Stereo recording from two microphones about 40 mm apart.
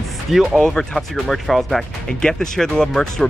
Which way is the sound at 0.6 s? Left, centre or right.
Centre.